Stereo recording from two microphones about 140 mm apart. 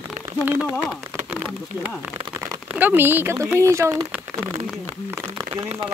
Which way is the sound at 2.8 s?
15° right (ahead or behind).